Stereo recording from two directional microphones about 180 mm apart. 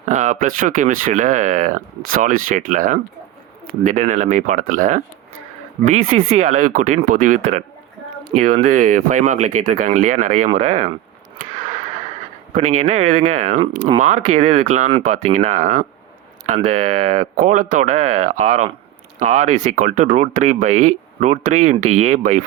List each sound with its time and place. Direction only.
0.0 s speech: 45° right (ahead or behind)
6.1 s speech: 50° right (ahead or behind)
12.5 s speech: 40° right (ahead or behind)